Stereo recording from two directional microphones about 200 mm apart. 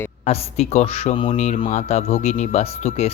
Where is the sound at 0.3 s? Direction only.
30° left (ahead or behind).